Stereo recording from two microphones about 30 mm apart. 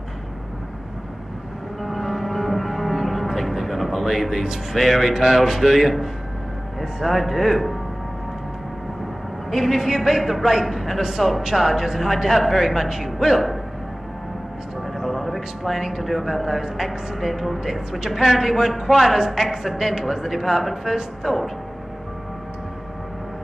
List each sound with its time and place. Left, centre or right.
1.8 s music: centre
3.6 s a sound: centre
4.7 s a man's voice: centre
6.8 s speech: centre
7.2 s speech: centre
9.5 s a man's voice: centre
15.0 s a sound: centre
15.6 s a man's voice: centre
16.0 s a man's voice: centre